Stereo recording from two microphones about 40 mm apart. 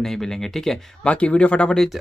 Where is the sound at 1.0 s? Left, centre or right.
Left.